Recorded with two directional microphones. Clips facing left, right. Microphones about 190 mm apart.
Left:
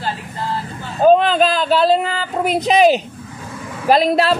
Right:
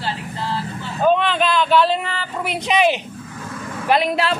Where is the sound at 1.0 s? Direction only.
40° left (ahead or behind).